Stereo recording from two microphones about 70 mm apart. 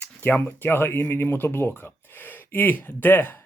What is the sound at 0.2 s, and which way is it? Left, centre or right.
Speech, left.